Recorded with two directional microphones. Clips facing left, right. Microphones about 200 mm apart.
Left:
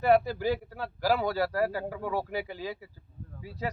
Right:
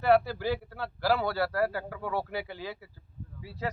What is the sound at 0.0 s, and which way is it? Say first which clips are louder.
Speech: left 1 dB; 15° left (ahead or behind).